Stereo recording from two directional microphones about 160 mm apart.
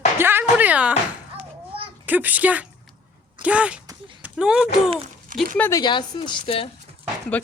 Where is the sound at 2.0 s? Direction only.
10° right (ahead or behind).